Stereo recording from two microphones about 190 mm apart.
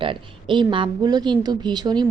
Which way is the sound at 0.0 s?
25° right (ahead or behind).